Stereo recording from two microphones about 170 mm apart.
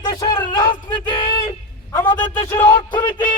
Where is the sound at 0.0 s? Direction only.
30° left (ahead or behind).